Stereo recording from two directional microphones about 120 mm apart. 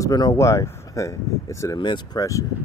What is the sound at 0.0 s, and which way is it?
Speech, 30° left (ahead or behind).